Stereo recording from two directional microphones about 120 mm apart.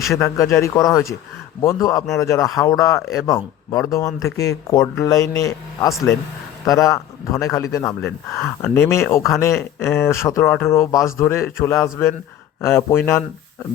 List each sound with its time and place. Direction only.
0.1 s speech: 25° left (ahead or behind)